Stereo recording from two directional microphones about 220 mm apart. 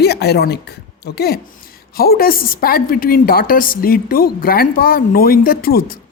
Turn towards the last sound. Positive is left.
turn(degrees=45)  # may be behind; listen again after turning